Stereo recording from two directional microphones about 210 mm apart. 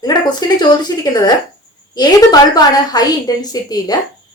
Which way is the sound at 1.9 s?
20° left (ahead or behind).